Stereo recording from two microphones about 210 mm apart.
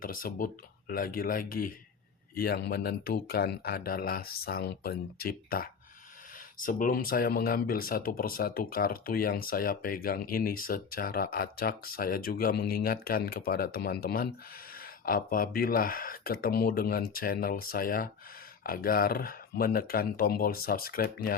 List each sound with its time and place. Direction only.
0.0 s speech: 45° left (ahead or behind)